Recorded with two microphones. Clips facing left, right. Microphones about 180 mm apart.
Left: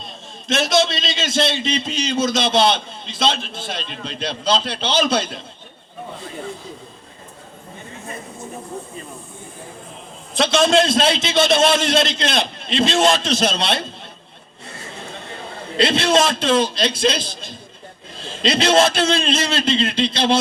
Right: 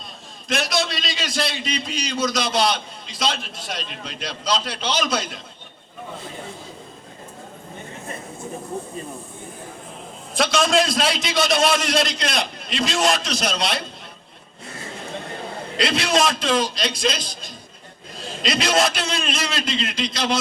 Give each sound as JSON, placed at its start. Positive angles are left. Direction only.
{"t": 0.0, "sound": "a man's voice", "side_deg": 25}
{"t": 10.3, "sound": "a man's voice", "side_deg": 25}
{"t": 15.8, "sound": "a man's voice", "side_deg": 25}